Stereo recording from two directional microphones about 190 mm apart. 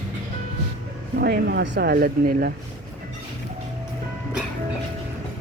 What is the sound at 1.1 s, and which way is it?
Speech, 55° right (ahead or behind).